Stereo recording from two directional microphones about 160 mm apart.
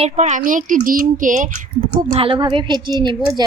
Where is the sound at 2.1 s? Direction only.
35° right (ahead or behind).